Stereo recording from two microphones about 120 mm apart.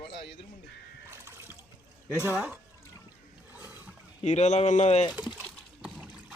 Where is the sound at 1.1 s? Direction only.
20° right (ahead or behind).